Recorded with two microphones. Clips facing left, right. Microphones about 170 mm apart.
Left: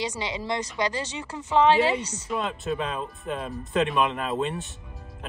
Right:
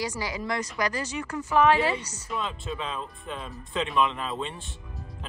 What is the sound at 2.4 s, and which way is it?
Speech, 50° left (ahead or behind).